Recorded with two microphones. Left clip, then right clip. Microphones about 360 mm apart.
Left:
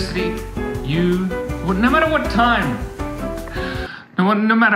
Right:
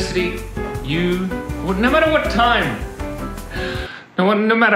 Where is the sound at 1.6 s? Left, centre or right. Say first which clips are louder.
Right 1 dB; centre.